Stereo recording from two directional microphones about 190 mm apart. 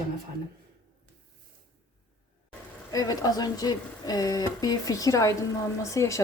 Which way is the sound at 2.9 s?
20° left (ahead or behind).